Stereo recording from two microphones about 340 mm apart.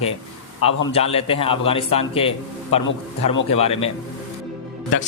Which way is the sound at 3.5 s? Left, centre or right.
Centre.